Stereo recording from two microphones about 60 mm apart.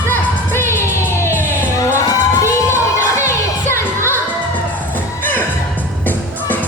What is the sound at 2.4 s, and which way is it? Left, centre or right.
Music, left.